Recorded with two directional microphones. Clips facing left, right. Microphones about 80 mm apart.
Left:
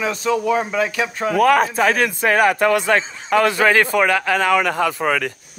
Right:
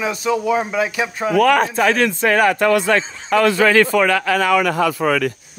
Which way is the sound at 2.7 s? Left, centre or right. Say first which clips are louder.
Right 1 dB; left.